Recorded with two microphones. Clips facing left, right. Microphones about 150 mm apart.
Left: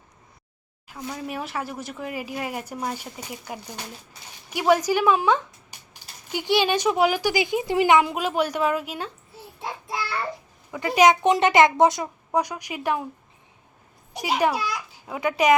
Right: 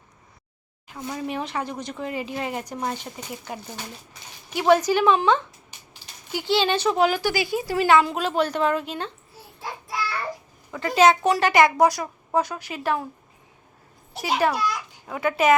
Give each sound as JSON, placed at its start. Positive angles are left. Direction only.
{"t": 0.9, "sound": "speech", "side_deg": 0}
{"t": 9.6, "sound": "child singing", "side_deg": 25}
{"t": 10.7, "sound": "speech", "side_deg": 15}
{"t": 14.1, "sound": "speech", "side_deg": 15}